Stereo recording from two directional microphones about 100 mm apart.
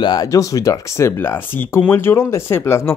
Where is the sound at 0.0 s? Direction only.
45° left (ahead or behind).